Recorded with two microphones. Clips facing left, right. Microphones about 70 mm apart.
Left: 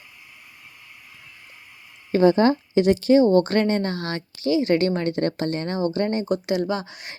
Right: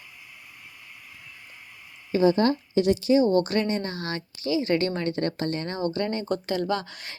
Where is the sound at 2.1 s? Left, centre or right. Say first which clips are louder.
Left 4 dB; left.